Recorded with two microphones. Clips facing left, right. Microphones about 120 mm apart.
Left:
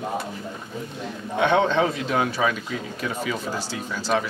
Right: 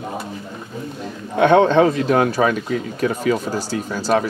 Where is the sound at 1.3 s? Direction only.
50° right (ahead or behind).